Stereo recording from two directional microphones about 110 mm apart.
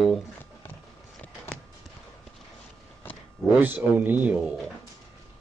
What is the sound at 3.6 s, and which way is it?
Speech, 15° right (ahead or behind).